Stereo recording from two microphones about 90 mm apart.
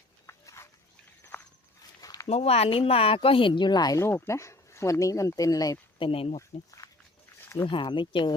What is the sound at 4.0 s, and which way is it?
Speech, 30° left (ahead or behind).